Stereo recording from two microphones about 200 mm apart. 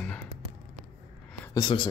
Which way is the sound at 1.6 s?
25° left (ahead or behind).